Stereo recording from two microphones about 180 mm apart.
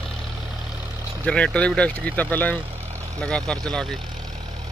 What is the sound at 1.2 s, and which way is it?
Speech, 5° left (ahead or behind).